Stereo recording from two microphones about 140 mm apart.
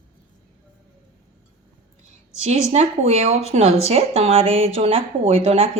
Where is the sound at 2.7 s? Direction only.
50° right (ahead or behind).